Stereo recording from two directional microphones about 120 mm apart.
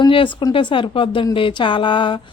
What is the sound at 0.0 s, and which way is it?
Speech, 45° left (ahead or behind).